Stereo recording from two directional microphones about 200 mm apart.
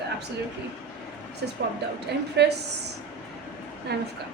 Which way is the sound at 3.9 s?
55° right (ahead or behind).